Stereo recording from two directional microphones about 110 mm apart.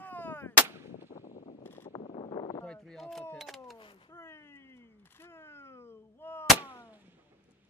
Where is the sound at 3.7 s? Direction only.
50° left (ahead or behind).